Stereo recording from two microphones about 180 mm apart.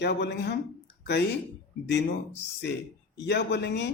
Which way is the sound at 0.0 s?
70° left (ahead or behind).